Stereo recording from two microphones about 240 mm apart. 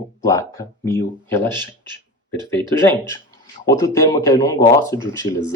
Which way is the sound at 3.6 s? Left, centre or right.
Centre.